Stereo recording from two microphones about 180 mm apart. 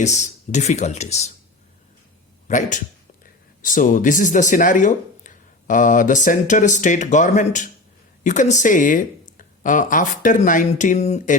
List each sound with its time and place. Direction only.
0.0 s speech: 40° left (ahead or behind)
2.5 s speech: 45° left (ahead or behind)